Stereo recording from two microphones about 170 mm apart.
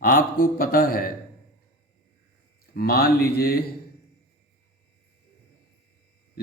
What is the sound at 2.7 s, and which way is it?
Speech, 60° left (ahead or behind).